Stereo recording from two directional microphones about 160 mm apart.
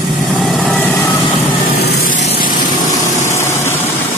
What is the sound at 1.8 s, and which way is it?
Vehicle, 75° left (ahead or behind).